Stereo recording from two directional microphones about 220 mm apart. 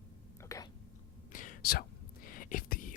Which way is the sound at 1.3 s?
40° left (ahead or behind).